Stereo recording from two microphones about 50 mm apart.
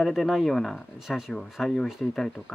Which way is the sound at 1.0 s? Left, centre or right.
Centre.